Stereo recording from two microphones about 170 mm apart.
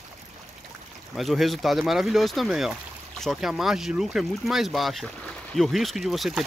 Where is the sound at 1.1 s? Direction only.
Centre (ahead or behind).